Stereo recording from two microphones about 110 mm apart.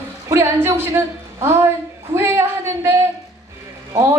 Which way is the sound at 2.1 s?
25° right (ahead or behind).